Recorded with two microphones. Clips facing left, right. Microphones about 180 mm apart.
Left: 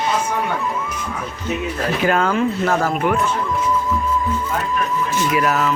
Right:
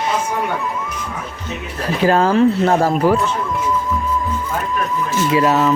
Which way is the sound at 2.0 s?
30° right (ahead or behind).